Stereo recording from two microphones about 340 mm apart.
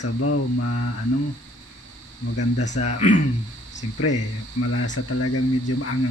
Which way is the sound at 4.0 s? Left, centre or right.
Left.